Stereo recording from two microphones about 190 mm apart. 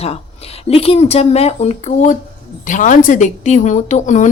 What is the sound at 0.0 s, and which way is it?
A woman's voice, 30° left (ahead or behind).